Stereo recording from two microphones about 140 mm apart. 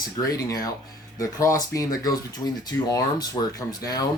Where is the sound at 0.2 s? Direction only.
25° left (ahead or behind).